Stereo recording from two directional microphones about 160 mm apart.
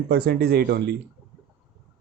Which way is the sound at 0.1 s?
75° right (ahead or behind).